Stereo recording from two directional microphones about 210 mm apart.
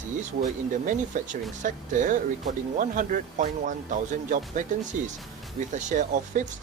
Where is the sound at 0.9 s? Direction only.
40° right (ahead or behind).